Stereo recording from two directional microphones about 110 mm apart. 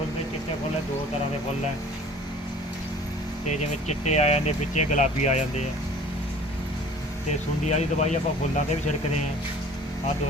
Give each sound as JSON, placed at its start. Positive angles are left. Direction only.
{"t": 3.4, "sound": "speech", "side_deg": 90}
{"t": 7.7, "sound": "speech", "side_deg": 90}